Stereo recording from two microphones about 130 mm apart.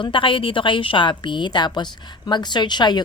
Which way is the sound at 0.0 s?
40° left (ahead or behind).